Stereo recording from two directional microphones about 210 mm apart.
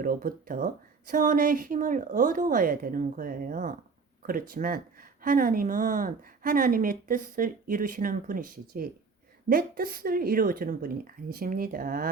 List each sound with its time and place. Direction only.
0.0 s a woman's voice: 40° right (ahead or behind)